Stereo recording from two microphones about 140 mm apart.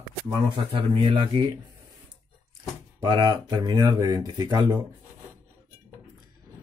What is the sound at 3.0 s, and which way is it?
Speech, 30° right (ahead or behind).